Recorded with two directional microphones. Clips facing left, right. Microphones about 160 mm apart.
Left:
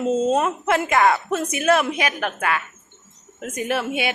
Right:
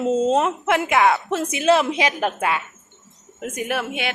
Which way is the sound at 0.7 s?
5° right (ahead or behind).